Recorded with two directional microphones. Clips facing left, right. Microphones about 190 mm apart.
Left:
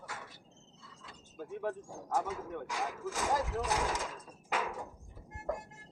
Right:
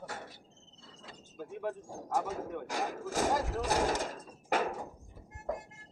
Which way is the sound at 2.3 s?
55° right (ahead or behind).